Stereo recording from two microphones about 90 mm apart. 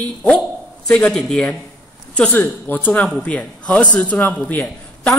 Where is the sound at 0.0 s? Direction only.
10° left (ahead or behind).